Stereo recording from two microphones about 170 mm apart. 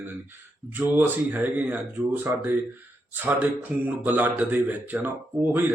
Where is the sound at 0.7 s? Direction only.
10° right (ahead or behind).